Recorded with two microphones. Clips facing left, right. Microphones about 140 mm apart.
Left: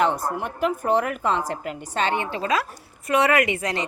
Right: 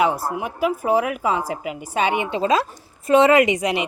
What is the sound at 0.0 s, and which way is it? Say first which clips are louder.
A woman's voice: right 2 dB; 10° right (ahead or behind).